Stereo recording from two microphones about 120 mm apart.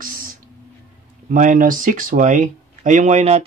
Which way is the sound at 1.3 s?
90° right.